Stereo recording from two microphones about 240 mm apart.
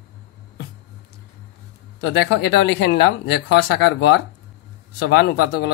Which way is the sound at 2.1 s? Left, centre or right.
Left.